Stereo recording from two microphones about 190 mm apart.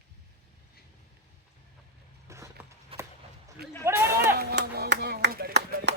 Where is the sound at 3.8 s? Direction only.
10° right (ahead or behind).